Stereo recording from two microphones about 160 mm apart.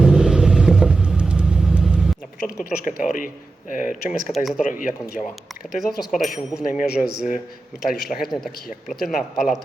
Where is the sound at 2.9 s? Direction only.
55° left (ahead or behind).